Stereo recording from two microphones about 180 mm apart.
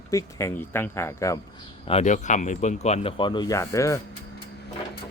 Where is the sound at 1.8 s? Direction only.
35° left (ahead or behind).